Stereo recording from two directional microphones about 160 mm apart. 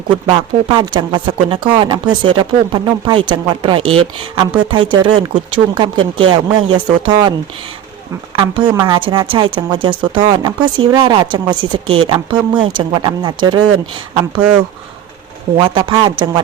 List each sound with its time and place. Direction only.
0.3 s speech: 30° right (ahead or behind)
8.4 s speech: 30° right (ahead or behind)
15.5 s speech: 35° right (ahead or behind)